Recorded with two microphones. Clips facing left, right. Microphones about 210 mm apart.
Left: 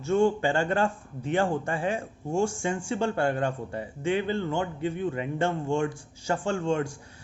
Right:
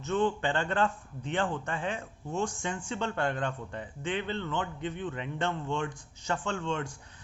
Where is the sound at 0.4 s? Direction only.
10° left (ahead or behind).